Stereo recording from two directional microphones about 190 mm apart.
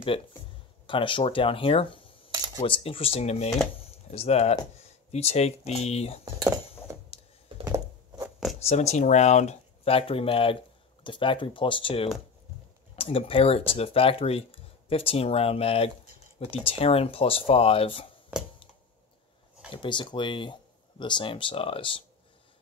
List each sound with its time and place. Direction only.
0.8 s speech: 25° left (ahead or behind)
2.3 s camera: 20° right (ahead or behind)
2.6 s speech: 30° left (ahead or behind)
6.2 s speech: 15° right (ahead or behind)
7.6 s a sound: 15° right (ahead or behind)
8.5 s speech: 35° left (ahead or behind)
18.3 s a sound: 5° right (ahead or behind)
19.7 s speech: 25° left (ahead or behind)